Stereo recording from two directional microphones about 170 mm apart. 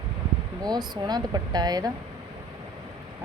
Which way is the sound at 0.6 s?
25° right (ahead or behind).